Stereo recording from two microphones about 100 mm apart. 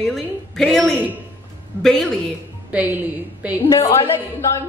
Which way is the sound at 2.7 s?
15° right (ahead or behind).